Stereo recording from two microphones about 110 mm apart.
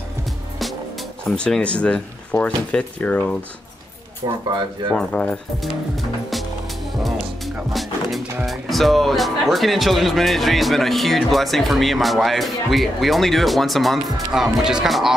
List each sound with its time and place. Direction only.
1.3 s speech: 10° left (ahead or behind)
4.2 s speech: 45° right (ahead or behind)
4.9 s speech: 10° left (ahead or behind)
7.0 s music: centre (ahead or behind)
8.5 s speech: centre (ahead or behind)